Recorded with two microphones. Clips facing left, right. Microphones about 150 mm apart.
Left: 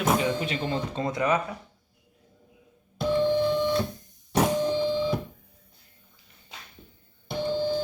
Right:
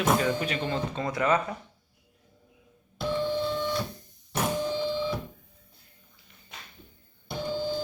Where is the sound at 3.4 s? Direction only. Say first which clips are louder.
Left 5 dB; 20° left (ahead or behind).